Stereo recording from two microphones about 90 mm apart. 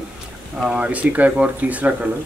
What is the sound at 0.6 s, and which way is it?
Speech, 15° right (ahead or behind).